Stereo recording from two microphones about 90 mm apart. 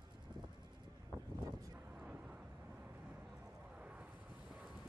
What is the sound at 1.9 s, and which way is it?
Vehicle, 15° right (ahead or behind).